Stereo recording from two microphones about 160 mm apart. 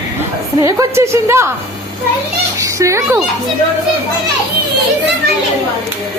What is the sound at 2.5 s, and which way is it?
Speech, 20° right (ahead or behind).